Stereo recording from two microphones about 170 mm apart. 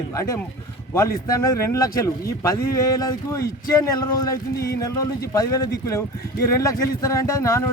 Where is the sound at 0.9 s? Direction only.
20° left (ahead or behind).